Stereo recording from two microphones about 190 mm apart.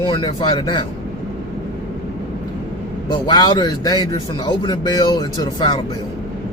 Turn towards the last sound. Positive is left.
turn(degrees=25)  # may be behind; listen again after turning